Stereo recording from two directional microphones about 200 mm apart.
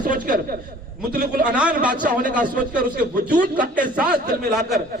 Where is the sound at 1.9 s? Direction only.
40° right (ahead or behind).